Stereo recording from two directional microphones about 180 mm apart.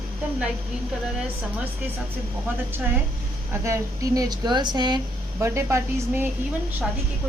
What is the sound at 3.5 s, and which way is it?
Speech, 15° right (ahead or behind).